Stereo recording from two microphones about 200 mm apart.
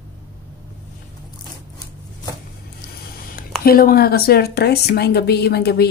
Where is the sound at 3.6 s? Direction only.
50° left (ahead or behind).